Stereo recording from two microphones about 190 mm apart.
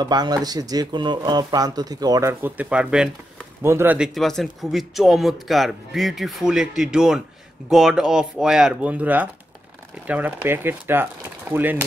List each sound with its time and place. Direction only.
0.0 s a man's voice: 20° right (ahead or behind)